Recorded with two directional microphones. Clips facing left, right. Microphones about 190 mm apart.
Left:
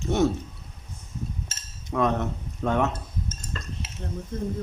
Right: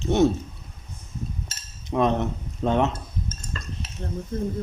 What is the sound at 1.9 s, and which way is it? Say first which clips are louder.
Speech: right 2 dB; 25° right (ahead or behind).